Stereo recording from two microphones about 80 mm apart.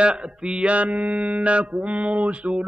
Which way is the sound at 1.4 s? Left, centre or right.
Centre.